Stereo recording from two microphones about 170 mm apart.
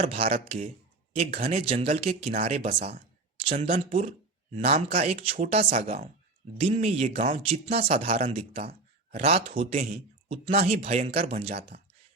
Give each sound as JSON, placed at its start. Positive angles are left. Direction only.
{"t": 0.1, "sound": "a man's voice", "side_deg": -35}